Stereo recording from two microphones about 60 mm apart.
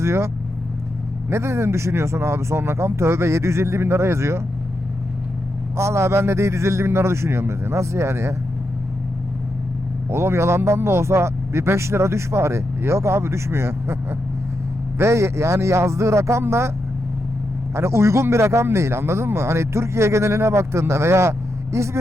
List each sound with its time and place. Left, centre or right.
0.0 s a man's voice: right
1.3 s a man's voice: right
5.7 s a man's voice: right
10.1 s a man's voice: right
17.7 s a man's voice: right